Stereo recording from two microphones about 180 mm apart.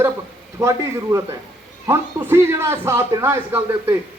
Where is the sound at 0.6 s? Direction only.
15° right (ahead or behind).